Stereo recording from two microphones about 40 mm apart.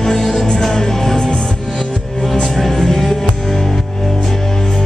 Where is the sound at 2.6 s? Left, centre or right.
Centre.